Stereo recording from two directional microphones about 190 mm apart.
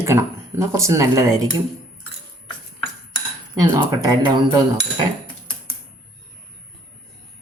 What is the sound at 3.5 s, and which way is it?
Speech, 20° right (ahead or behind).